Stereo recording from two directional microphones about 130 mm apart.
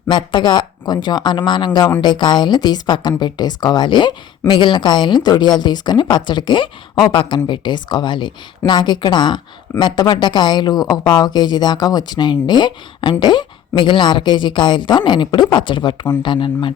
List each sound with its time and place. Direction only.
0.1 s speech: 35° left (ahead or behind)